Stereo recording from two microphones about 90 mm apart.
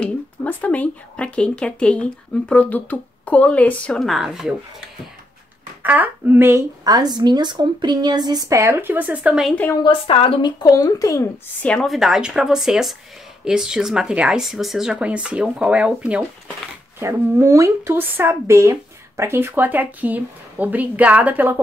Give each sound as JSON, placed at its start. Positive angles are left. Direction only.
{"t": 0.0, "sound": "speech", "side_deg": 15}
{"t": 4.1, "sound": "speech", "side_deg": -5}
{"t": 5.8, "sound": "speech", "side_deg": -20}
{"t": 6.8, "sound": "a woman's voice", "side_deg": -45}
{"t": 8.5, "sound": "speech", "side_deg": -30}
{"t": 9.8, "sound": "a woman's voice", "side_deg": 90}
{"t": 10.4, "sound": "speech", "side_deg": 50}
{"t": 11.6, "sound": "speech", "side_deg": 10}
{"t": 11.9, "sound": "speech", "side_deg": -5}
{"t": 17.0, "sound": "speech", "side_deg": -35}